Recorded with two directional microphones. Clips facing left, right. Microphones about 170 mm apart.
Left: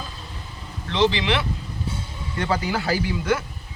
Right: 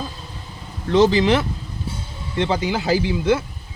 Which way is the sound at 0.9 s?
45° right (ahead or behind).